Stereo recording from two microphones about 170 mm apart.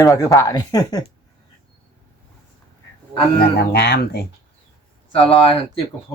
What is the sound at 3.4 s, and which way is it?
Speech, 70° left (ahead or behind).